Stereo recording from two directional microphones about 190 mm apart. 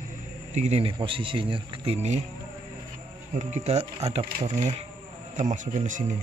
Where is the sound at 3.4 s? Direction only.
35° right (ahead or behind).